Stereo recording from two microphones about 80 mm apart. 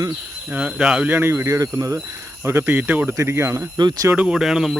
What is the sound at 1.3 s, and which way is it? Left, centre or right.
Speech, right.